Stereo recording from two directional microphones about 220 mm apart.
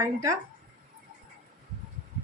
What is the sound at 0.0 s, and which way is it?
Speech, 15° right (ahead or behind).